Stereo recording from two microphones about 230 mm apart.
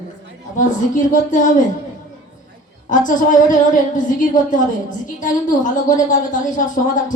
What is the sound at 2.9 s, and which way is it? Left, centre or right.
A woman's voice, left.